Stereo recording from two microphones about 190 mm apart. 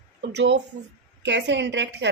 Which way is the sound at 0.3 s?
65° right (ahead or behind).